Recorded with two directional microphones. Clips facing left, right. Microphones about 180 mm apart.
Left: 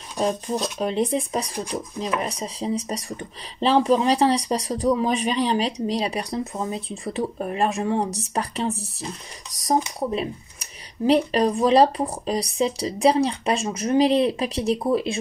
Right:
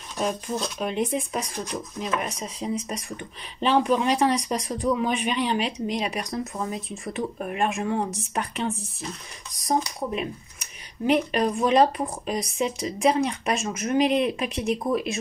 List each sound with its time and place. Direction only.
0.2 s speech: 30° left (ahead or behind)